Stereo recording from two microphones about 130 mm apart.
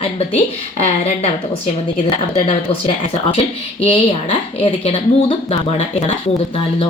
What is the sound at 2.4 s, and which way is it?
A woman's voice, 45° left (ahead or behind).